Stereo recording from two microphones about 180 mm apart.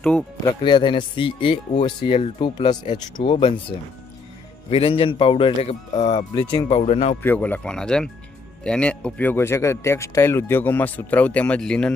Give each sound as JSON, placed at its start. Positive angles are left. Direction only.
{"t": 0.0, "sound": "speech", "side_deg": 5}
{"t": 0.4, "sound": "speech", "side_deg": 25}
{"t": 4.7, "sound": "speech", "side_deg": 30}
{"t": 7.2, "sound": "speech", "side_deg": 10}